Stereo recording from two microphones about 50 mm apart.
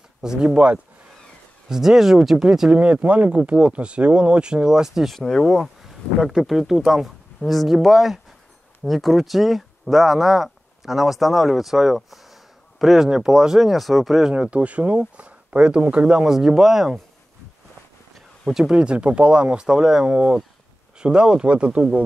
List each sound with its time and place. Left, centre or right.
0.2 s speech: centre
1.7 s speech: centre
2.7 s speech: right; by 5.1 s centre
5.1 s speech: centre
6.2 s speech: centre
7.3 s speech: centre
14.3 s speech: right
16.3 s speech: centre
18.5 s speech: centre
18.8 s speech: right